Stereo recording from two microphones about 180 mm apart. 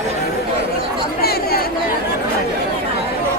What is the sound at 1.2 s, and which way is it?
Chatter, 60° left (ahead or behind).